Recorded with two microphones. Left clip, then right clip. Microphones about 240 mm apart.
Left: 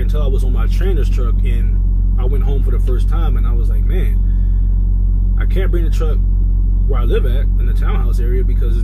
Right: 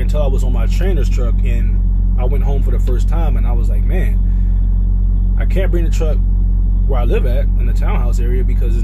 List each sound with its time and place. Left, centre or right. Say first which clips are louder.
0.1 s speech: right 6 dB; centre
5.5 s speech: right 2 dB; centre